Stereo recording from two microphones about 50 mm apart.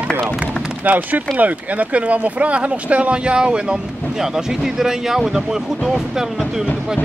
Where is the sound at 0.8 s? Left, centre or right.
Right; by 6.3 s centre.